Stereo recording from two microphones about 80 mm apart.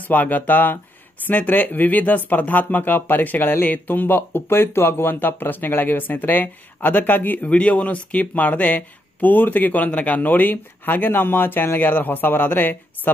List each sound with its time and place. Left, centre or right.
0.1 s speech: left